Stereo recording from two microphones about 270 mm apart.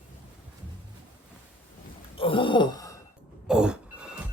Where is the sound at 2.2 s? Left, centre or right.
Centre.